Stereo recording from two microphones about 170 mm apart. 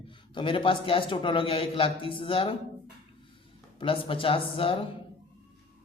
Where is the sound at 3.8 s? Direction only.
30° left (ahead or behind).